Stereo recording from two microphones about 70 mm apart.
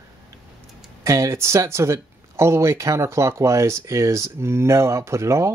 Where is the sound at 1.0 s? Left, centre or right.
Right.